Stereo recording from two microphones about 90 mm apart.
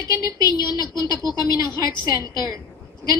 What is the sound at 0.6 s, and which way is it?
Speech, 50° left (ahead or behind).